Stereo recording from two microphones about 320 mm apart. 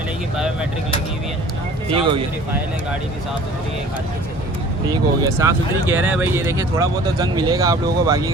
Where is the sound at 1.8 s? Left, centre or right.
Centre.